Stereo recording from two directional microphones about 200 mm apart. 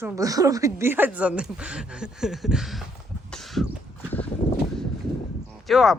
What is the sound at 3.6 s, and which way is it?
Horse, 10° left (ahead or behind).